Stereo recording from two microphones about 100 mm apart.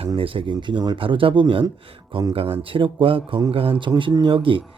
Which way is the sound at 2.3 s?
70° right (ahead or behind).